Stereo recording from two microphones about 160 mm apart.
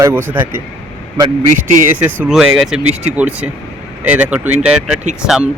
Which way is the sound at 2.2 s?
5° right (ahead or behind).